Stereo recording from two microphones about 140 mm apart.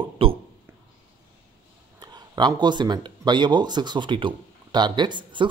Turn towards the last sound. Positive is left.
turn(degrees=-35)  # may be behind; listen again after turning